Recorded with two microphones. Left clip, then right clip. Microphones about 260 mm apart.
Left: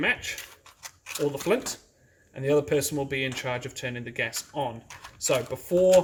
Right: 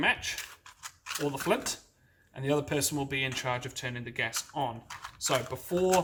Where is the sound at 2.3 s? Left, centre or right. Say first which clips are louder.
Left 6 dB; centre.